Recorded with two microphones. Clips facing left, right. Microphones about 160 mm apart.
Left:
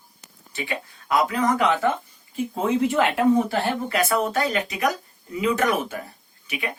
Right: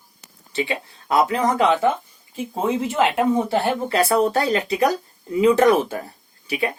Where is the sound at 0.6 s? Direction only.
25° right (ahead or behind).